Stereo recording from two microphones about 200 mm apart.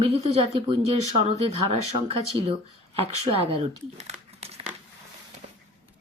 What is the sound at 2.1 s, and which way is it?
Speech, 30° right (ahead or behind).